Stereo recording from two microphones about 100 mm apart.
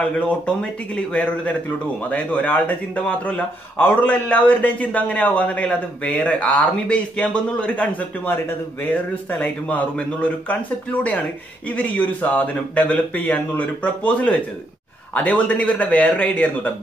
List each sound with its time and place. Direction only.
0.0 s a man's voice: 10° left (ahead or behind)